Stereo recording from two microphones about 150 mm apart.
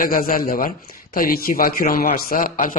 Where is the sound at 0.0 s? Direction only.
65° left (ahead or behind).